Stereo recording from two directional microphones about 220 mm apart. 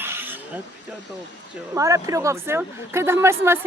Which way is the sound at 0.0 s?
10° right (ahead or behind).